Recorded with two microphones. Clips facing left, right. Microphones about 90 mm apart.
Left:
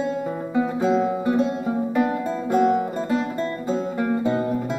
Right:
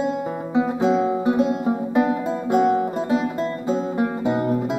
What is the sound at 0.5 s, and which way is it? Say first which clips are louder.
Music: right 2 dB; 20° right (ahead or behind).